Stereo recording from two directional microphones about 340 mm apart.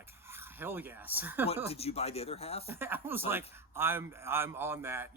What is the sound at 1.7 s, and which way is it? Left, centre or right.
Speech, centre.